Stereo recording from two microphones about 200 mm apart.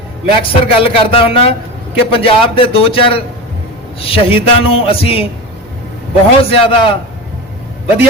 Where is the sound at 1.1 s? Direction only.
30° left (ahead or behind).